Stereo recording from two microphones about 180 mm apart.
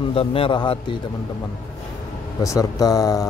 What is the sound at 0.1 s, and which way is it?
Speech, 30° left (ahead or behind).